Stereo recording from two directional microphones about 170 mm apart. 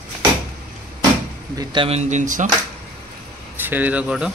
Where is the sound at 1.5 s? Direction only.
30° right (ahead or behind); by 2.5 s 45° right (ahead or behind).